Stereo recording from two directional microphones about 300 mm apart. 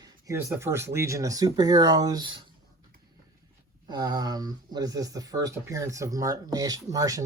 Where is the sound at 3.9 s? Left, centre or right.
Centre.